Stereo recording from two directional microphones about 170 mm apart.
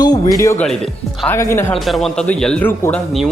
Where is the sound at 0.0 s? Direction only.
20° left (ahead or behind).